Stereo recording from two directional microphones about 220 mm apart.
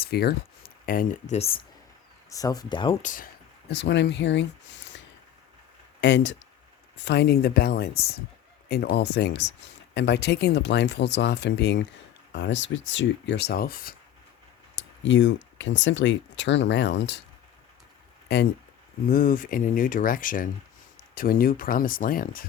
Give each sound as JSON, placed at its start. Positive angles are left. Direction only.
{"t": 0.0, "sound": "speech", "side_deg": 45}
{"t": 1.4, "sound": "speech", "side_deg": 25}
{"t": 3.0, "sound": "speech", "side_deg": 35}
{"t": 3.7, "sound": "speech", "side_deg": 50}
{"t": 14.8, "sound": "speech", "side_deg": 55}
{"t": 18.3, "sound": "speech", "side_deg": 50}